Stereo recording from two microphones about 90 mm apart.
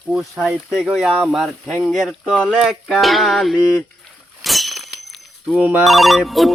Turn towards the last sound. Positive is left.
turn(degrees=0)  # may be behind; listen again after turning